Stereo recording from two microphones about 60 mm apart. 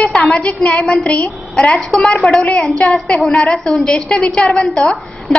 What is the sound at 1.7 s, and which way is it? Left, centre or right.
A woman's voice, centre.